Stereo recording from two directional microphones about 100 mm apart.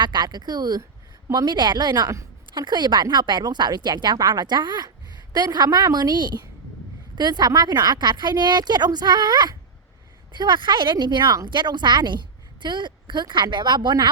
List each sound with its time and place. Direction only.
0.0 s speech: 45° right (ahead or behind)